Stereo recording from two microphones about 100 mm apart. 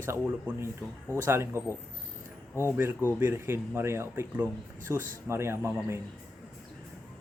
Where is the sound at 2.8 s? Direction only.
20° right (ahead or behind).